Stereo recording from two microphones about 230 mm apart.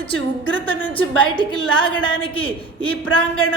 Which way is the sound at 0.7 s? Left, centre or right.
Centre.